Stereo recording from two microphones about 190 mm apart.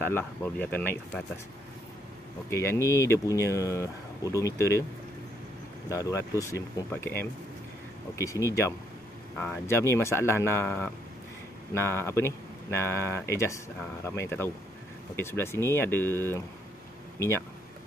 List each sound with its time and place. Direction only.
0.0 s speech: 10° left (ahead or behind)
2.5 s speech: 15° left (ahead or behind)
5.9 s speech: 15° left (ahead or behind)
8.2 s speech: 15° left (ahead or behind)